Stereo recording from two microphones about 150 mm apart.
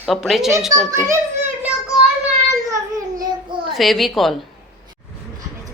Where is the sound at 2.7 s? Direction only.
25° right (ahead or behind).